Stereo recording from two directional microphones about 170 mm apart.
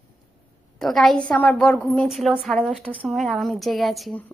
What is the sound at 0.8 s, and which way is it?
A woman's voice, centre (ahead or behind).